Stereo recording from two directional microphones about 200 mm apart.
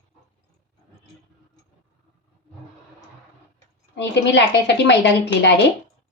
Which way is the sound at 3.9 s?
60° left (ahead or behind).